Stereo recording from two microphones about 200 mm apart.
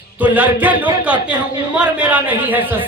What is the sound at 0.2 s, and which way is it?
A man's voice, 10° right (ahead or behind).